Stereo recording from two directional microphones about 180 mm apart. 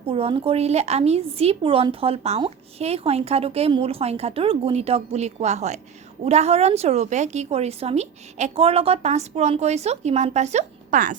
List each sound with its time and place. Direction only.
0.0 s a woman's voice: 30° right (ahead or behind); by 11.2 s 45° right (ahead or behind)